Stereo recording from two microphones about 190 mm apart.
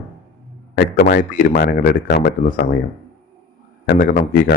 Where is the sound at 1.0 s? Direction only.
45° left (ahead or behind).